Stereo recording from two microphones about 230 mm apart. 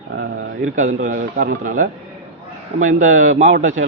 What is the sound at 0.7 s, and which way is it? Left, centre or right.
A man's voice, right.